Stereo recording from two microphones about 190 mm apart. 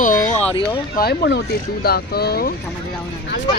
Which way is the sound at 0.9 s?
55° left (ahead or behind).